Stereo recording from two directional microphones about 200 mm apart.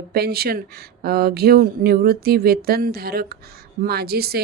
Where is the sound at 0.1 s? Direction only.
50° right (ahead or behind).